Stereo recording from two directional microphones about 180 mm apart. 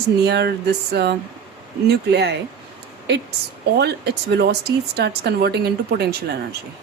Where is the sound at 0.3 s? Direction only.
65° right (ahead or behind).